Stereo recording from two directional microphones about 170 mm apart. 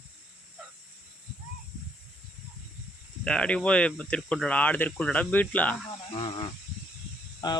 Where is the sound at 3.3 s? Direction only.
5° left (ahead or behind).